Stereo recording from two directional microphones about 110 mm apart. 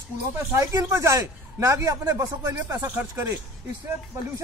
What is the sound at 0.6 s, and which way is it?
Speech, 25° right (ahead or behind).